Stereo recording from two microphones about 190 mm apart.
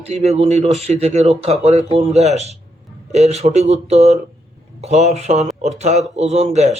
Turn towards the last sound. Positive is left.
turn(degrees=-35)  # may be behind; listen again after turning